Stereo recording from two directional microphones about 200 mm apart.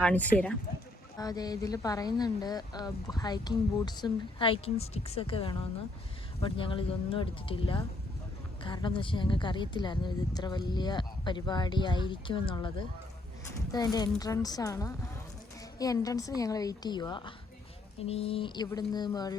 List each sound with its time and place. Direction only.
0.0 s a woman's voice: 5° left (ahead or behind)
1.2 s a woman's voice: 20° left (ahead or behind)